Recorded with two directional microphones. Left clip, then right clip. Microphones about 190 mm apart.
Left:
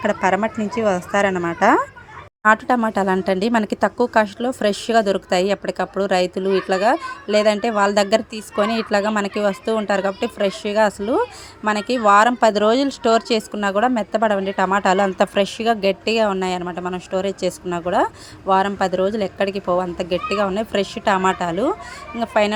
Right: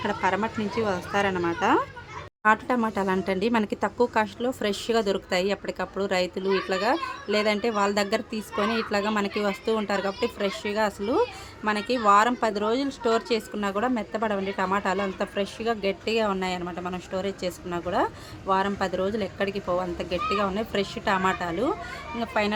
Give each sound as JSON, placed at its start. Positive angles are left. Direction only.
{"t": 0.0, "sound": "speech", "side_deg": 25}